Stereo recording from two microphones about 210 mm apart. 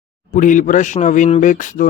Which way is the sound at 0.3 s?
35° left (ahead or behind).